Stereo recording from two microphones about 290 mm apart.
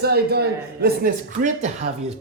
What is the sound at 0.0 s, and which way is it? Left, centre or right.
Speech, right.